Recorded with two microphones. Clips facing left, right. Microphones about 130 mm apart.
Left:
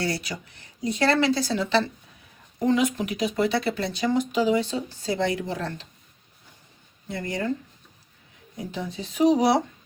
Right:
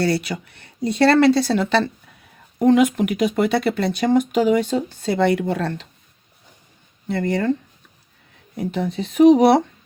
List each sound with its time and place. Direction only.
0.0 s speech: 65° right (ahead or behind)
7.1 s speech: 65° right (ahead or behind)
8.5 s speech: 60° right (ahead or behind)